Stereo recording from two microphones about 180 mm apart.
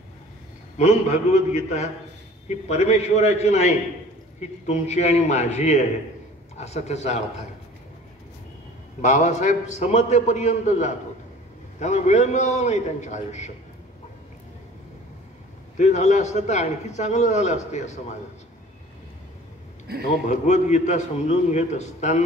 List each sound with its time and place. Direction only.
0.7 s a man's voice: 40° left (ahead or behind)
9.0 s a man's voice: 40° left (ahead or behind)
15.8 s a man's voice: 40° left (ahead or behind)
19.9 s a man's voice: 65° right (ahead or behind)
20.2 s a man's voice: 40° left (ahead or behind)